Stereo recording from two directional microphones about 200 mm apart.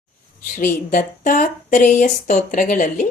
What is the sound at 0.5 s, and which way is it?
Mantra, 40° left (ahead or behind).